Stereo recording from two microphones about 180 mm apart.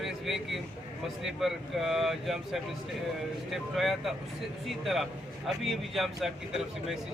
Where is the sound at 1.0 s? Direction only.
Centre (ahead or behind).